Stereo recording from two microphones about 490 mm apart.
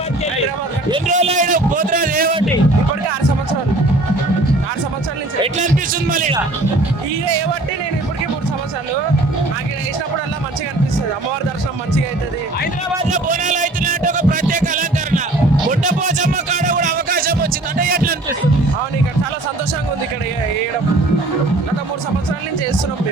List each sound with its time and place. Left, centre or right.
0.9 s a man's voice: centre
5.4 s a man's voice: centre
13.1 s a sound: centre